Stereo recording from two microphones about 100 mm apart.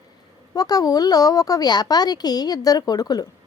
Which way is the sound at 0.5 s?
40° left (ahead or behind).